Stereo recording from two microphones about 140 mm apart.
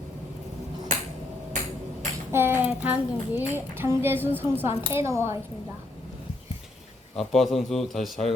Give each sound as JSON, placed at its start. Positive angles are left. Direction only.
{"t": 2.3, "sound": "a child's voice", "side_deg": -15}
{"t": 4.7, "sound": "a woman's voice", "side_deg": 45}
{"t": 4.9, "sound": "speech", "side_deg": -20}
{"t": 7.2, "sound": "a man's voice", "side_deg": 0}